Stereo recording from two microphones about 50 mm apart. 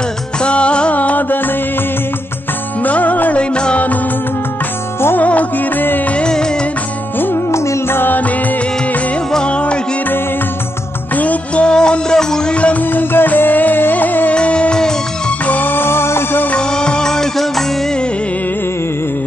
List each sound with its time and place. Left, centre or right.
0.4 s music: left
2.8 s music: left
3.5 s music: centre
5.2 s music: left
6.1 s music: centre
7.5 s music: left
7.9 s music: left
9.3 s music: left
11.1 s music: left
12.5 s music: left
12.9 s music: left
14.3 s music: left
15.4 s music: left
16.5 s music: centre